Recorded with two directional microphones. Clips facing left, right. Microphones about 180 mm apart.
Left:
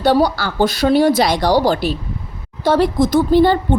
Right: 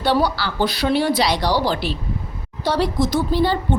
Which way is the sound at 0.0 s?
45° left (ahead or behind).